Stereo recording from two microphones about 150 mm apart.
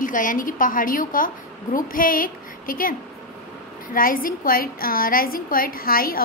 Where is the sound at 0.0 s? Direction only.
60° left (ahead or behind).